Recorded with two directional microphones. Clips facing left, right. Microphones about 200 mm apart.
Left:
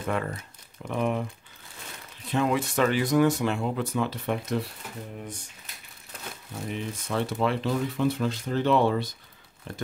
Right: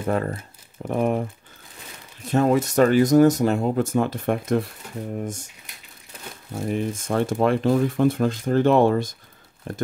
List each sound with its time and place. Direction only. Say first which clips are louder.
0.0 s speech: right 5 dB; 35° right (ahead or behind)
6.5 s speech: right 8 dB; 45° right (ahead or behind)